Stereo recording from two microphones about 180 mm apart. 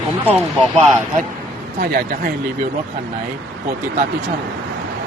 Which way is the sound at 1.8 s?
55° right (ahead or behind).